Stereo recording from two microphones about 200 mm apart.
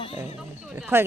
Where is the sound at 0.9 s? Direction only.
10° right (ahead or behind).